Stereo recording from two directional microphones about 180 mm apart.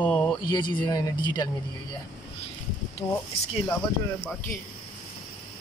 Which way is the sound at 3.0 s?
10° left (ahead or behind).